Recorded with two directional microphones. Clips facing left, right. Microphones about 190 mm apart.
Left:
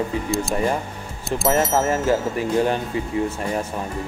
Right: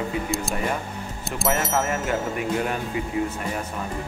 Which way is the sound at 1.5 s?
35° left (ahead or behind).